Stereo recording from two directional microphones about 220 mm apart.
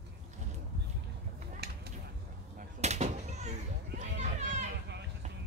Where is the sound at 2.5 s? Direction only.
30° right (ahead or behind).